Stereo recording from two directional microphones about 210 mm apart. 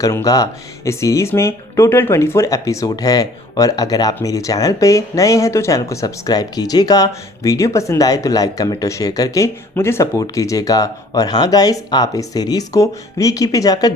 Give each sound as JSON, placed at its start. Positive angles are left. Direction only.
{"t": 0.0, "sound": "speech", "side_deg": 15}